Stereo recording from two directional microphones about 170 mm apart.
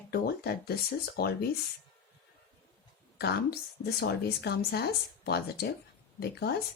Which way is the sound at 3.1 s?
70° left (ahead or behind).